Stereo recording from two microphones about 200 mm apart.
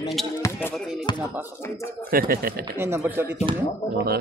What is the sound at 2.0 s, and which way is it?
Speech, 45° right (ahead or behind).